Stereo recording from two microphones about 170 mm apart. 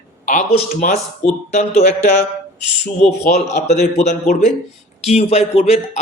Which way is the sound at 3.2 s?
70° left (ahead or behind).